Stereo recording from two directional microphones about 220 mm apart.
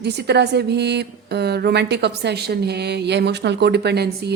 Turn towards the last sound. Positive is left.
turn(degrees=-50)  # may be behind; listen again after turning